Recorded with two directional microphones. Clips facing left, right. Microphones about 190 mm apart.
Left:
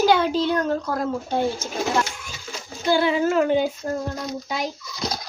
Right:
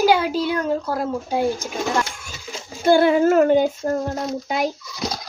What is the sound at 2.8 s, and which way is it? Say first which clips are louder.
A woman's voice: right 5 dB; 50° right (ahead or behind).